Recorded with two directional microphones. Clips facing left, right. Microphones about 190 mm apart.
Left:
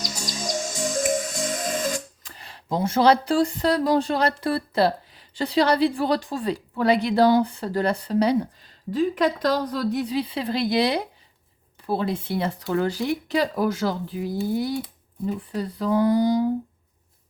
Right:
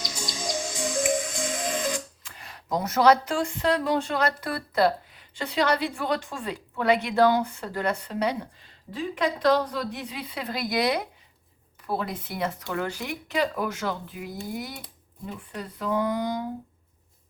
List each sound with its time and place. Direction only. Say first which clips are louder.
0.0 s music: left 2 dB; 40° left (ahead or behind)
9.1 s speech: left 1 dB; 40° left (ahead or behind)